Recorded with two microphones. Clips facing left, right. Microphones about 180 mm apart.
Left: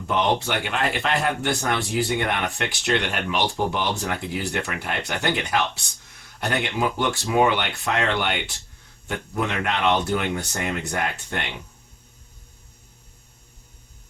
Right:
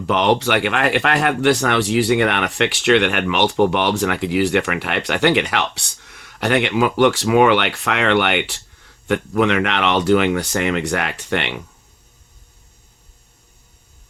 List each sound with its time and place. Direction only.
0.0 s speech: 90° right